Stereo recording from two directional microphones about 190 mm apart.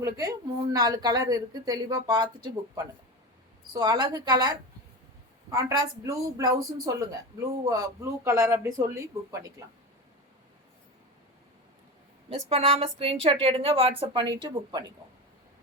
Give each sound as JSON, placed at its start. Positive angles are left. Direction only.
{"t": 0.2, "sound": "a woman's voice", "side_deg": -20}
{"t": 12.5, "sound": "a sound", "side_deg": -35}
{"t": 13.4, "sound": "a woman's voice", "side_deg": -30}